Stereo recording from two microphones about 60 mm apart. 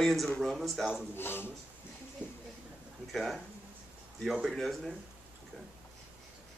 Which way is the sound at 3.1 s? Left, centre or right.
Centre.